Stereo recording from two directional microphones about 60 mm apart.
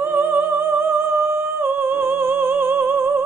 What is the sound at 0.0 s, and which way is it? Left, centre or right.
Music, right.